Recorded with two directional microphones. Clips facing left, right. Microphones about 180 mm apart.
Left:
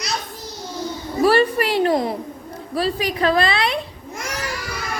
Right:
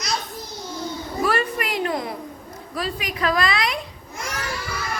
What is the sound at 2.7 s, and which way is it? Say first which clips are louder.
A woman's voice: left 7 dB; 30° left (ahead or behind).